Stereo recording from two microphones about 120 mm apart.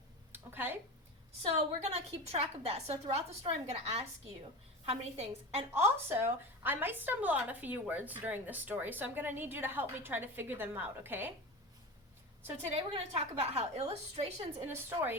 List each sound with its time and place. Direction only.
0.3 s a sound: 15° right (ahead or behind)
1.4 s a woman's voice: 60° right (ahead or behind)
5.7 s a woman's voice: 20° right (ahead or behind)
12.7 s a woman's voice: 50° right (ahead or behind)
14.7 s a woman's voice: 20° right (ahead or behind)